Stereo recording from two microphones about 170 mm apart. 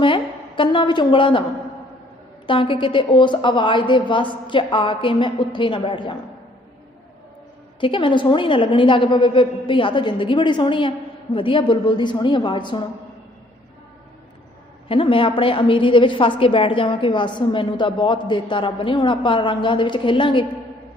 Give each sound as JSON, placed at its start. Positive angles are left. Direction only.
{"t": 0.0, "sound": "a woman's voice", "side_deg": 30}
{"t": 2.5, "sound": "a woman's voice", "side_deg": 30}
{"t": 7.8, "sound": "a woman's voice", "side_deg": 30}
{"t": 14.8, "sound": "a woman's voice", "side_deg": 30}